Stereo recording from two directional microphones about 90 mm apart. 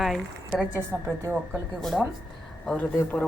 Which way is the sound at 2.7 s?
15° left (ahead or behind).